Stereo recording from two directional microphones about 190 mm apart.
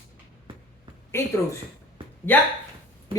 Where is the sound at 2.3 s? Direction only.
10° left (ahead or behind).